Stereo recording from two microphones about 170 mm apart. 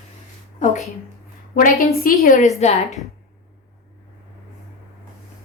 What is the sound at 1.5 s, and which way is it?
Speech, 55° left (ahead or behind).